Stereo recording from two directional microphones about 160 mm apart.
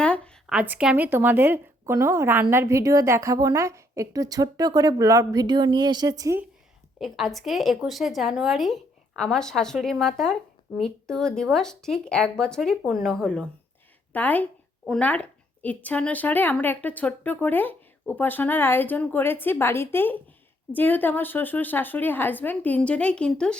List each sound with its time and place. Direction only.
0.4 s speech: 10° right (ahead or behind)
7.0 s a woman's voice: centre (ahead or behind)